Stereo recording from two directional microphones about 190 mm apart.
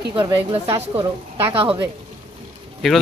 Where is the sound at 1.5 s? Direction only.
30° right (ahead or behind).